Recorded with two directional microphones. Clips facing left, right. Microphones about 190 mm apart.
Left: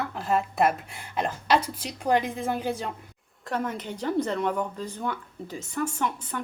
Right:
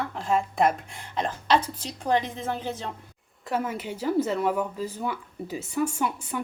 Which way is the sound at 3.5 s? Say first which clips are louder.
Right 1 dB; 5° right (ahead or behind).